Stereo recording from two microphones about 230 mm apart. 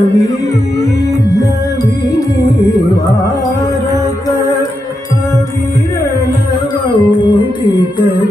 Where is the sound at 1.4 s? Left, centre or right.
Centre.